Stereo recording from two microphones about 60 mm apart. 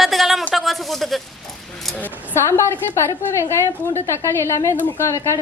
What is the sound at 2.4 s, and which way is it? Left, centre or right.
A woman's voice, left.